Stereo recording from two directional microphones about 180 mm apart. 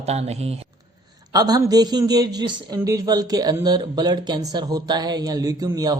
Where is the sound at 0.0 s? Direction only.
35° right (ahead or behind).